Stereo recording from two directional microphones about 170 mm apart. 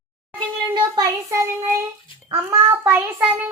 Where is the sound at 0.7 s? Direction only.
20° right (ahead or behind).